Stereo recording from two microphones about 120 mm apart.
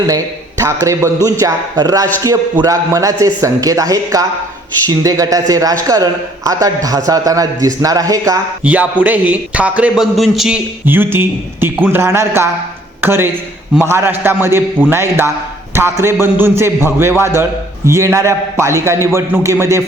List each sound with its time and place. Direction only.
0.6 s a man's voice: 25° right (ahead or behind)
8.6 s a man's voice: 10° right (ahead or behind)
10.8 s a man's voice: 15° right (ahead or behind)